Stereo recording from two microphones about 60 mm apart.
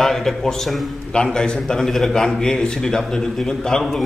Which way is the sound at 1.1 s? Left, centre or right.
Centre.